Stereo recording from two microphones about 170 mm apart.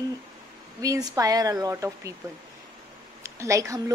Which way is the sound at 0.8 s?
20° right (ahead or behind).